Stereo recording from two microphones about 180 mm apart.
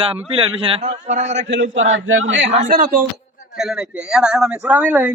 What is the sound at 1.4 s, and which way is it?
A man's voice, 85° right.